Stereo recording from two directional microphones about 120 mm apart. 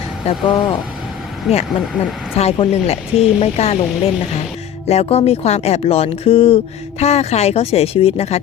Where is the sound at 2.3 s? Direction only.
60° left (ahead or behind).